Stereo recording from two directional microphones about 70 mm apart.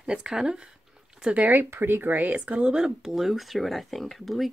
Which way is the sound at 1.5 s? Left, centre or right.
Right.